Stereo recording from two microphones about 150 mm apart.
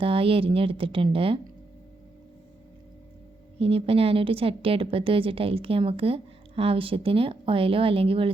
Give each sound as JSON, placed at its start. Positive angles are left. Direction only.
{"t": 0.0, "sound": "a woman's voice", "side_deg": -40}
{"t": 3.6, "sound": "a woman's voice", "side_deg": -40}